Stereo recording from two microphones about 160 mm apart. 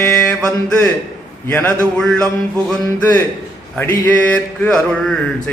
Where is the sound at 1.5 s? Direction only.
10° left (ahead or behind).